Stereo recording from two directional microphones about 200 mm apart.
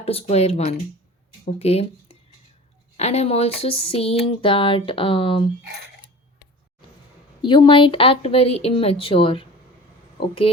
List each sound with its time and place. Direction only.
0.0 s speech: 30° left (ahead or behind)
3.0 s speech: 30° left (ahead or behind)
7.4 s speech: 25° left (ahead or behind)